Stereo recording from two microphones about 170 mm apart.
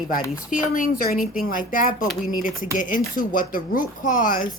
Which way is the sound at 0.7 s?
55° left (ahead or behind).